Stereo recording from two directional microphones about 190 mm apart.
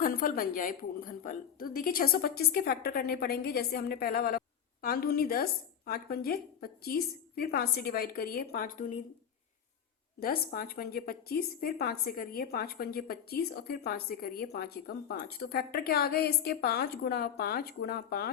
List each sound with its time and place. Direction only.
0.0 s a woman's voice: 50° left (ahead or behind)
10.2 s a woman's voice: 50° left (ahead or behind)